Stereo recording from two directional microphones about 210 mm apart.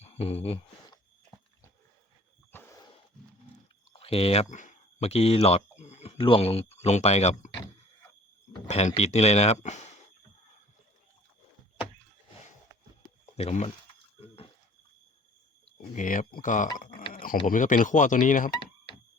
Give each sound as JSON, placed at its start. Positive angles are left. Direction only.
{"t": 0.0, "sound": "speech", "side_deg": 30}
{"t": 2.5, "sound": "a sound", "side_deg": 10}
{"t": 3.9, "sound": "speech", "side_deg": 25}
{"t": 8.6, "sound": "speech", "side_deg": 30}
{"t": 13.3, "sound": "speech", "side_deg": 30}
{"t": 14.2, "sound": "a sound", "side_deg": 25}
{"t": 16.0, "sound": "speech", "side_deg": 40}
{"t": 17.1, "sound": "a sound", "side_deg": 40}
{"t": 17.4, "sound": "speech", "side_deg": 35}